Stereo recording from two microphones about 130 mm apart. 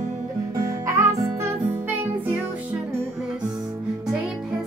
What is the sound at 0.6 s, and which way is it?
Music, 25° right (ahead or behind).